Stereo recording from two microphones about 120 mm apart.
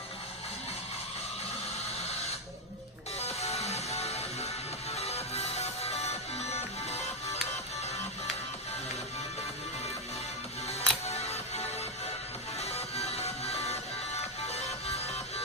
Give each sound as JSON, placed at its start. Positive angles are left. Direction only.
{"t": 3.2, "sound": "music", "side_deg": 60}
{"t": 10.7, "sound": "music", "side_deg": 65}